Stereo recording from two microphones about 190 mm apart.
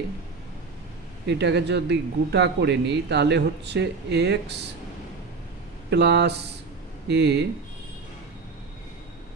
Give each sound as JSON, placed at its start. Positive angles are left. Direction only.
{"t": 1.2, "sound": "speech", "side_deg": -65}
{"t": 5.9, "sound": "speech", "side_deg": -65}